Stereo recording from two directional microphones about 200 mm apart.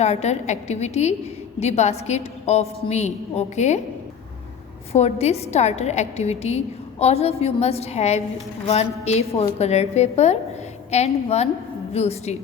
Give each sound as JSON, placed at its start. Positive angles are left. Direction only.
{"t": 0.0, "sound": "a woman's voice", "side_deg": 35}
{"t": 4.9, "sound": "a woman's voice", "side_deg": 30}